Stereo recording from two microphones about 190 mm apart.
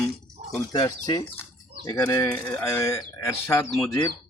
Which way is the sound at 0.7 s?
20° left (ahead or behind).